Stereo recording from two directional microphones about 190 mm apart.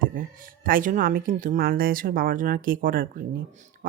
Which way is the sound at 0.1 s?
50° right (ahead or behind).